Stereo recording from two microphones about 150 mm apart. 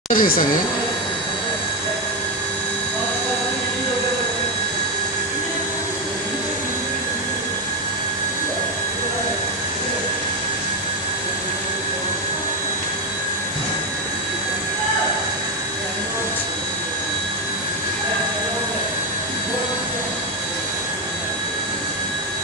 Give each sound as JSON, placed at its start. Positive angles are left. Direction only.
{"t": 0.1, "sound": "speech", "side_deg": 65}